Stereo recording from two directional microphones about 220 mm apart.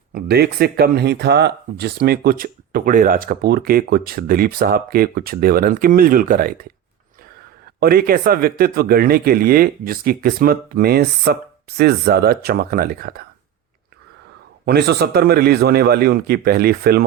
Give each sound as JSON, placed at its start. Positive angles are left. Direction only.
{"t": 0.1, "sound": "speech", "side_deg": -45}
{"t": 7.8, "sound": "speech", "side_deg": -45}
{"t": 14.6, "sound": "speech", "side_deg": -45}